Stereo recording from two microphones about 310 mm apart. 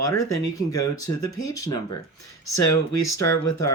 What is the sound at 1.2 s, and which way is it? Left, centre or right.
Speech, centre.